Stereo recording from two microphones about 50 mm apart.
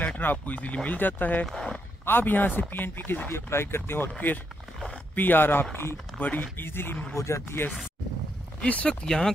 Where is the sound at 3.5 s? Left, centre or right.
Left.